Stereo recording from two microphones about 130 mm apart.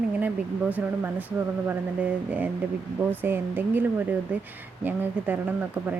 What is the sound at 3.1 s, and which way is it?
A woman's voice, 15° right (ahead or behind).